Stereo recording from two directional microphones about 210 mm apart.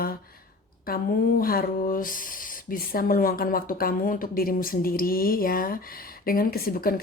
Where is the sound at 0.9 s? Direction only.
45° left (ahead or behind).